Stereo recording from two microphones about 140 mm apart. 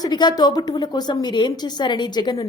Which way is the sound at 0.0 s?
30° left (ahead or behind).